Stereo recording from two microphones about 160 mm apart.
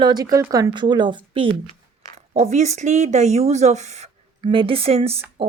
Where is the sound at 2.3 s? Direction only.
45° right (ahead or behind).